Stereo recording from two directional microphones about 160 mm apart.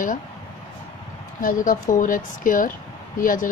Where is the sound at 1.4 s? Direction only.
55° left (ahead or behind).